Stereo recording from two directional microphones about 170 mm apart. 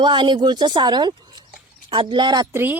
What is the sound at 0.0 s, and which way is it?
Speech, 30° right (ahead or behind).